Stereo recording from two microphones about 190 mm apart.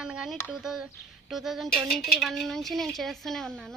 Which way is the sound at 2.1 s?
Centre (ahead or behind).